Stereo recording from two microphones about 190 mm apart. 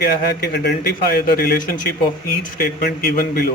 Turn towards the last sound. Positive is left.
turn(degrees=50)  # may be behind; listen again after turning